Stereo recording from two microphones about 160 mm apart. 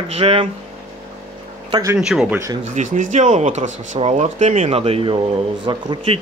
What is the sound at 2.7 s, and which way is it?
Speech, 50° right (ahead or behind).